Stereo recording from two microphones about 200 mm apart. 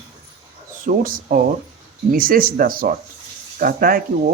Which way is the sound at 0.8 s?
45° right (ahead or behind).